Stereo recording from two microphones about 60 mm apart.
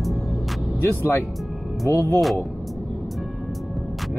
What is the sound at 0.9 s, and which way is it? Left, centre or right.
Speech, left.